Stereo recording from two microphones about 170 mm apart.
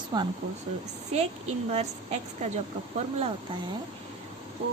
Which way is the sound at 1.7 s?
35° right (ahead or behind).